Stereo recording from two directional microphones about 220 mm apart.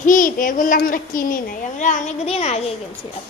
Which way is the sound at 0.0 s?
35° left (ahead or behind).